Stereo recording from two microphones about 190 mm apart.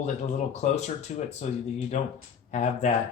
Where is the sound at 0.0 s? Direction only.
40° left (ahead or behind).